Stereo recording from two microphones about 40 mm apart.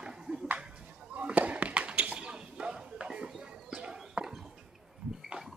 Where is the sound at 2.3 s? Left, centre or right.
Right.